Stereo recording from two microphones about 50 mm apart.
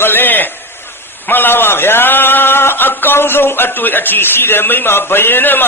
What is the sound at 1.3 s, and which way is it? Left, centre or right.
A man's voice, left.